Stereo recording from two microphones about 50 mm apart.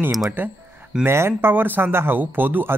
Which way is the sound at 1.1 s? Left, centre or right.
Right.